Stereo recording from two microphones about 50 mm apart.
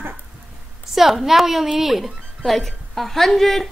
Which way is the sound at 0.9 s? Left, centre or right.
Centre.